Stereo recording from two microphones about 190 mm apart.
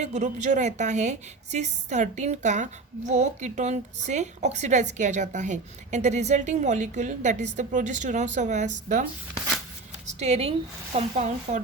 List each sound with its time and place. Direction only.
0.0 s a woman's voice: 35° right (ahead or behind)
10.2 s a woman's voice: 35° right (ahead or behind)